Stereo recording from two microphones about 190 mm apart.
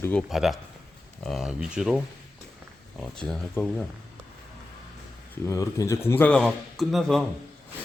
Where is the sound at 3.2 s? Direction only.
5° left (ahead or behind).